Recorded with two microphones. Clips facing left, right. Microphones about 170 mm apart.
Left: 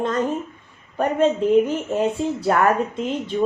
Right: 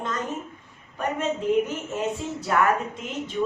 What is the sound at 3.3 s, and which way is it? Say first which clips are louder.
Speech: left 5 dB; 40° left (ahead or behind).